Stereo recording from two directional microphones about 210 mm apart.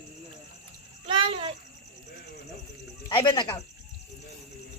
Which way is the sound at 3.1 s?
20° left (ahead or behind).